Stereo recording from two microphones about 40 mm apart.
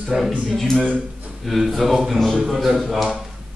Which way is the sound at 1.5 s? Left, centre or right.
Centre.